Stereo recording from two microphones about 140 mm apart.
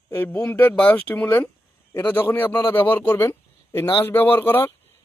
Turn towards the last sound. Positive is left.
turn(degrees=15)  # may be behind; listen again after turning